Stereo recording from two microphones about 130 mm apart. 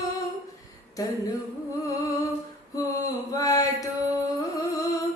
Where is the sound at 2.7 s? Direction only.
25° left (ahead or behind).